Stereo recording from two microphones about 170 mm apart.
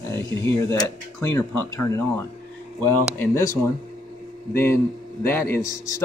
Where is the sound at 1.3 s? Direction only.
20° left (ahead or behind).